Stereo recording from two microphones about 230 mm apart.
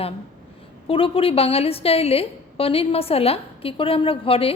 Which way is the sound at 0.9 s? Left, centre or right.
Left.